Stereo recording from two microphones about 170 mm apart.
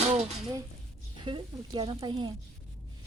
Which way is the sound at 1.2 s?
30° right (ahead or behind).